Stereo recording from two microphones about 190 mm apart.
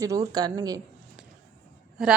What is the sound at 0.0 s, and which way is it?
Speech, 20° right (ahead or behind).